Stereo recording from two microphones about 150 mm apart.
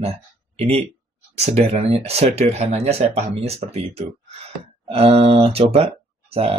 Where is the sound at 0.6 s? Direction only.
45° right (ahead or behind).